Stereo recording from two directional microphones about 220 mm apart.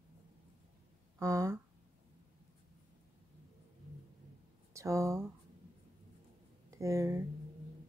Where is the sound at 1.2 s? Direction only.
15° right (ahead or behind).